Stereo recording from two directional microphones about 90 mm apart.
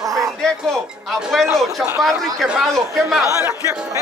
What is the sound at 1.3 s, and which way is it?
Speech, centre (ahead or behind).